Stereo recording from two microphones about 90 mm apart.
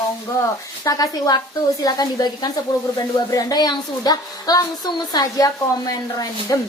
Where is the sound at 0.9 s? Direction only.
45° left (ahead or behind).